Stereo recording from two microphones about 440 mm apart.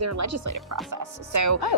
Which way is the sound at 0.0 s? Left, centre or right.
Right.